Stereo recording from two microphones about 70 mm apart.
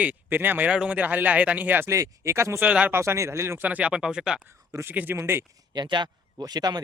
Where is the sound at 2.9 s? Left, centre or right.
Right.